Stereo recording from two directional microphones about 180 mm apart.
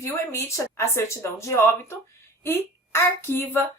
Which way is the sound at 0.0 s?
15° left (ahead or behind).